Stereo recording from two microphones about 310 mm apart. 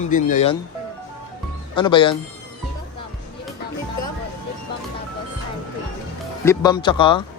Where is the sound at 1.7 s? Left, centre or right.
Centre.